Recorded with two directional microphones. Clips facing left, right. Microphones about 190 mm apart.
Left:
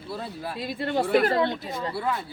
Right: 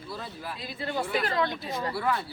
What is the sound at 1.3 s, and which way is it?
Speech, 25° left (ahead or behind).